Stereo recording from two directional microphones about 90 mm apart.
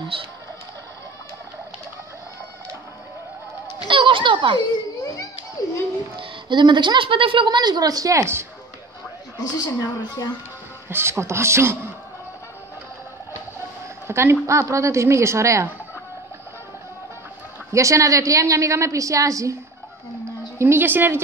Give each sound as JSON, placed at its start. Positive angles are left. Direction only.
{"t": 0.1, "sound": "music", "side_deg": -90}
{"t": 3.8, "sound": "speech", "side_deg": -70}
{"t": 4.6, "sound": "a child's voice", "side_deg": 50}
{"t": 6.1, "sound": "speech", "side_deg": -60}
{"t": 7.4, "sound": "a woman's voice", "side_deg": -50}
{"t": 9.4, "sound": "a woman's voice", "side_deg": 45}
{"t": 10.9, "sound": "speech", "side_deg": -25}
{"t": 14.0, "sound": "a woman's voice", "side_deg": -30}
{"t": 17.7, "sound": "a woman's voice", "side_deg": -35}
{"t": 20.5, "sound": "speech", "side_deg": -25}